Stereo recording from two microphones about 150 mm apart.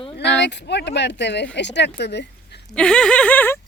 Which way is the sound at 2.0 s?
90° left.